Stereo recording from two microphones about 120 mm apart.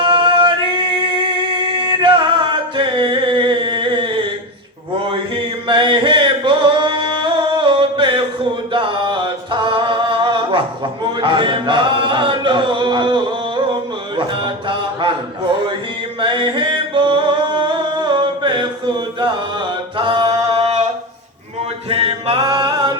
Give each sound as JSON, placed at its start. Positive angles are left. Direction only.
{"t": 0.0, "sound": "male singing", "side_deg": -45}
{"t": 1.7, "sound": "music", "side_deg": -40}
{"t": 5.6, "sound": "music", "side_deg": -45}
{"t": 14.2, "sound": "mantra", "side_deg": -45}
{"t": 16.2, "sound": "music", "side_deg": -45}
{"t": 17.6, "sound": "chant", "side_deg": -40}
{"t": 20.0, "sound": "mantra", "side_deg": -40}
{"t": 21.8, "sound": "music", "side_deg": -55}
{"t": 22.4, "sound": "music", "side_deg": -35}